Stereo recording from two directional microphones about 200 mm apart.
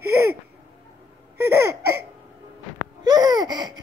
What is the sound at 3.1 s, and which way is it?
Laughter, 20° right (ahead or behind).